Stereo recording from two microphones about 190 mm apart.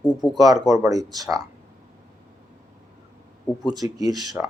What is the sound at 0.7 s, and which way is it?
Speech, 20° right (ahead or behind).